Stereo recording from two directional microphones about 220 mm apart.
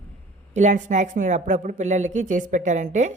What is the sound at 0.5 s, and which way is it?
Speech, 35° right (ahead or behind).